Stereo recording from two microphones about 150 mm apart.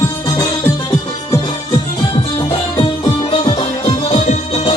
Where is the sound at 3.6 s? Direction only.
40° left (ahead or behind).